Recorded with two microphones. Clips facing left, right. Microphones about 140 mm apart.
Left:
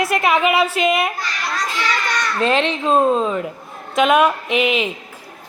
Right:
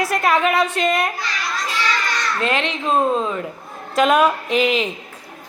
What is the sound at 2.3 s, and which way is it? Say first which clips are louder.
Speech: left 5 dB; 25° left (ahead or behind).